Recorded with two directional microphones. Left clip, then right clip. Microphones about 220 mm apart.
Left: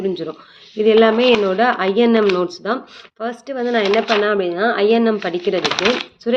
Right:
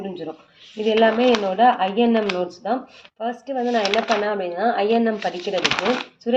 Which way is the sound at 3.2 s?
40° left (ahead or behind).